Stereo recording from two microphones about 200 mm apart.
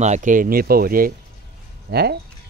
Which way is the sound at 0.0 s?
40° right (ahead or behind).